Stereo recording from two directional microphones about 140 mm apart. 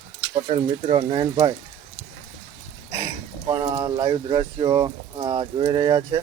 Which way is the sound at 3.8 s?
30° right (ahead or behind).